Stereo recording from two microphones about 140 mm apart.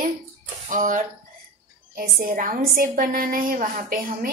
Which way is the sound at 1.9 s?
90° right.